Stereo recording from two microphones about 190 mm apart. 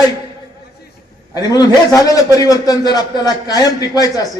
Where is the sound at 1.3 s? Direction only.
20° left (ahead or behind).